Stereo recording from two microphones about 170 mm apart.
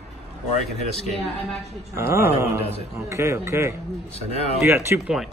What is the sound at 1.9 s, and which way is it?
Speech, 15° right (ahead or behind).